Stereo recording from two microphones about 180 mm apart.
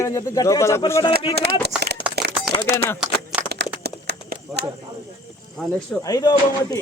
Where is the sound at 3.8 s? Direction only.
65° right (ahead or behind).